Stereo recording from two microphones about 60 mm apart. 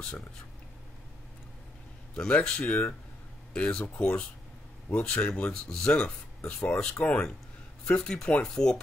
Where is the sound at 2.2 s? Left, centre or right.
Centre.